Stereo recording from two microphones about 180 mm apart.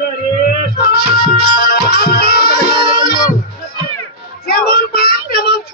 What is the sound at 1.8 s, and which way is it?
Music, 65° left (ahead or behind).